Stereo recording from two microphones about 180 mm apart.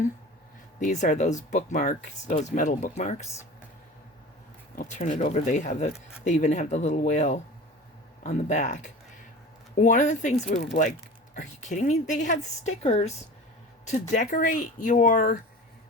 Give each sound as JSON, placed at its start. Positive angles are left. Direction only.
{"t": 0.8, "sound": "speech", "side_deg": 45}
{"t": 4.7, "sound": "speech", "side_deg": 45}